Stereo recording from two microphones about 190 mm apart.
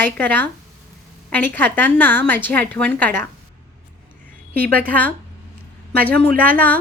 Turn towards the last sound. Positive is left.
turn(degrees=10)  # may be behind; listen again after turning